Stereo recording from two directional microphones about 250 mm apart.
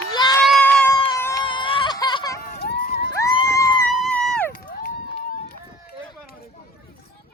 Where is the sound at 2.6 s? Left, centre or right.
Left.